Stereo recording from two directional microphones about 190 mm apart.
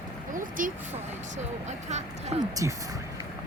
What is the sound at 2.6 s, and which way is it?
Speech, 15° right (ahead or behind).